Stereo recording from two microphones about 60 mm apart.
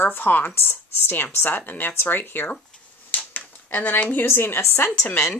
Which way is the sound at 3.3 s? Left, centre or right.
Left.